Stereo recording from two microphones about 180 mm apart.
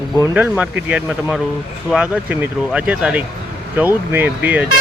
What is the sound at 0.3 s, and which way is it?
Speech, 10° right (ahead or behind).